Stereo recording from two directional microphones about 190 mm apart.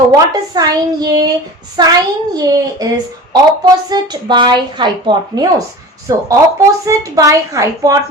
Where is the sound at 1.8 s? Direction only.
20° right (ahead or behind).